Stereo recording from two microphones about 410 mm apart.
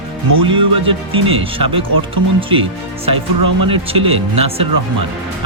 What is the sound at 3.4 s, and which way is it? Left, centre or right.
Speech, right.